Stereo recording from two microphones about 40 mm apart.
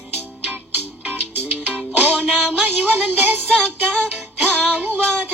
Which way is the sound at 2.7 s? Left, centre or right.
Right.